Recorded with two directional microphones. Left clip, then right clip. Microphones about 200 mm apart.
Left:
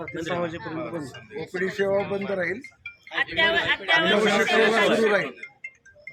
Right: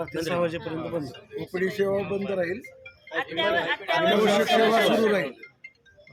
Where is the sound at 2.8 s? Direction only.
40° left (ahead or behind).